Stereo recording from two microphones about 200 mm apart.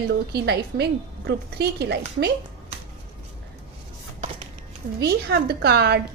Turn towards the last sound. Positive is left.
turn(degrees=-55)  # may be behind; listen again after turning